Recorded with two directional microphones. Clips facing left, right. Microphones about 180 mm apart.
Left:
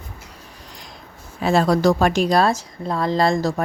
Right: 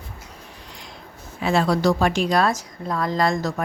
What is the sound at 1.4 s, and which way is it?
A woman's voice, 40° left (ahead or behind).